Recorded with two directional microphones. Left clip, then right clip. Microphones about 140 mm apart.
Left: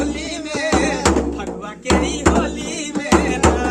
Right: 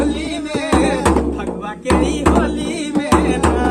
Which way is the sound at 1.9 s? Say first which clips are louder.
Right 2 dB; 25° left (ahead or behind).